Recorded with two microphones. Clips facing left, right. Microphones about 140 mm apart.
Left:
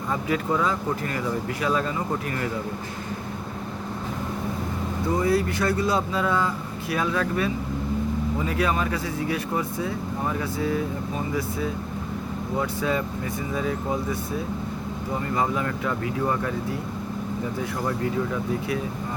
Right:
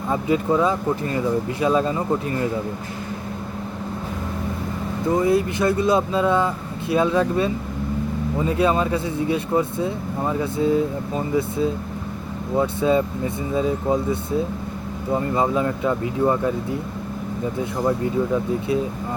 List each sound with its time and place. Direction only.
0.1 s speech: 20° right (ahead or behind)
5.1 s speech: 20° right (ahead or behind)